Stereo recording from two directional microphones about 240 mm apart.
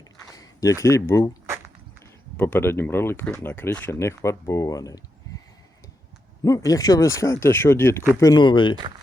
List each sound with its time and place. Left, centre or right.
0.3 s speech: centre
2.4 s speech: centre
6.4 s speech: centre